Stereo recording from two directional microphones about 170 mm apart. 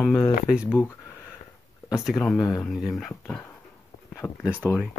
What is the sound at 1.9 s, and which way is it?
Speech, centre (ahead or behind).